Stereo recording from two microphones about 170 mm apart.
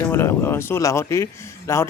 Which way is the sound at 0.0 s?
15° left (ahead or behind).